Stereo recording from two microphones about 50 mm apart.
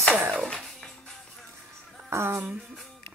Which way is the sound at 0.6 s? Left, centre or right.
Centre.